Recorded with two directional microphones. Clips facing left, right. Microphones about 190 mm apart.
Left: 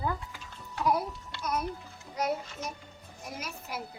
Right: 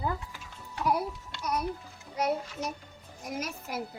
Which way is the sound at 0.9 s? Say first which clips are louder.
Even; 15° right (ahead or behind).